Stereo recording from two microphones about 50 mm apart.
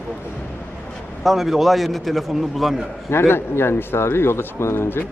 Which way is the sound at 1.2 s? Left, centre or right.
Centre.